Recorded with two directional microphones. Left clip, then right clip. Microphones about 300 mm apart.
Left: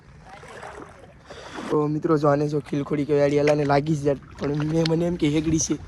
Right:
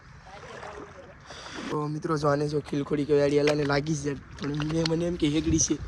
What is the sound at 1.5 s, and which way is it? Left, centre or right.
Speech, centre.